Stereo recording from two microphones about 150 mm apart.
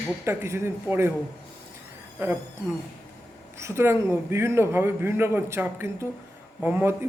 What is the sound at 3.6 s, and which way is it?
A man's voice, 15° right (ahead or behind).